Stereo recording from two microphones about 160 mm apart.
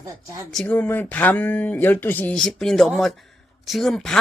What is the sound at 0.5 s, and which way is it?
Speech, 10° left (ahead or behind).